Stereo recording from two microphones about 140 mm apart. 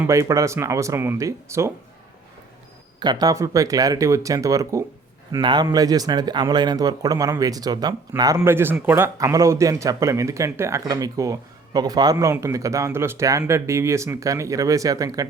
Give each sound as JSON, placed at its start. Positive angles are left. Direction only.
{"t": 0.1, "sound": "speech", "side_deg": -20}
{"t": 3.0, "sound": "a man's voice", "side_deg": -30}
{"t": 8.4, "sound": "speech", "side_deg": -15}